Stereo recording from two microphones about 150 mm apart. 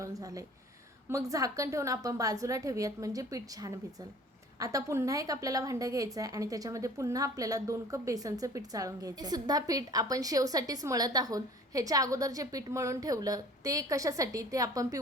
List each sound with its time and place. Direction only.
0.0 s a woman's voice: 20° right (ahead or behind)